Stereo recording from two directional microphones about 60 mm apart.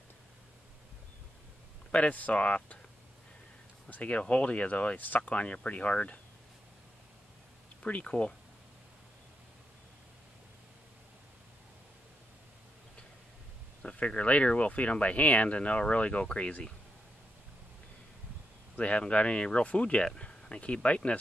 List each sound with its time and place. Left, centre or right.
1.9 s speech: left
3.9 s speech: left
7.8 s speech: left
13.8 s speech: centre
18.8 s speech: left